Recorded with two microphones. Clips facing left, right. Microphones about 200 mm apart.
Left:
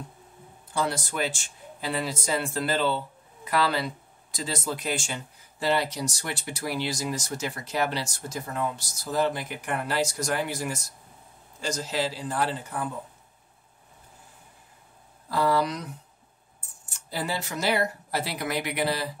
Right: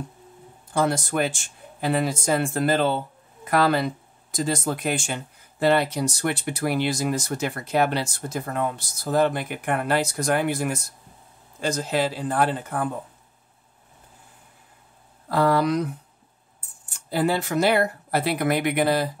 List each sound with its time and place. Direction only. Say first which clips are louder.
0.7 s speech: right 6 dB; 50° right (ahead or behind)
15.2 s speech: right 4 dB; 60° right (ahead or behind)
17.1 s speech: right 9 dB; 55° right (ahead or behind)